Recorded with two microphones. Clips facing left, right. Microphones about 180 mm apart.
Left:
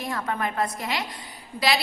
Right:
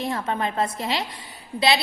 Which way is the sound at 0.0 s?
25° right (ahead or behind).